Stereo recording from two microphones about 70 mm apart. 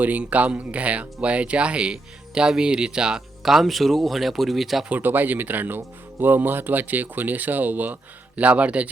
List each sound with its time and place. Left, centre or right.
0.0 s speech: right; by 4.9 s centre
4.9 s speech: right